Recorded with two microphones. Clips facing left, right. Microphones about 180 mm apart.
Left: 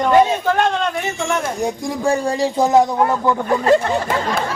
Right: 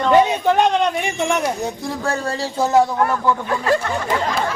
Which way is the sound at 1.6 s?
15° left (ahead or behind).